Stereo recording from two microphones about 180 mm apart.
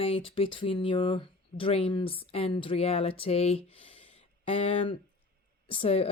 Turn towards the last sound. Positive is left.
turn(degrees=35)  # may be behind; listen again after turning